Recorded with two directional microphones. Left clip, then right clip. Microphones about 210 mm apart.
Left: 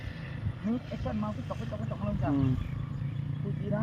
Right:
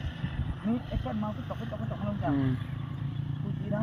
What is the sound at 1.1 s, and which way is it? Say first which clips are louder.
Speech: even; 10° left (ahead or behind).